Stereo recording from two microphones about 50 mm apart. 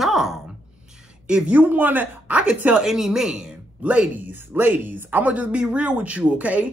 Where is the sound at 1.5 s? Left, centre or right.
Right.